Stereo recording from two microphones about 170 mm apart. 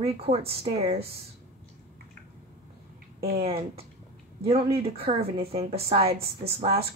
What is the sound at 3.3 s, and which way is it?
A woman's voice, 35° right (ahead or behind).